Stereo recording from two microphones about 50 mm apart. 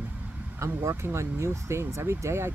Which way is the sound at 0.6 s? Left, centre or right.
Right.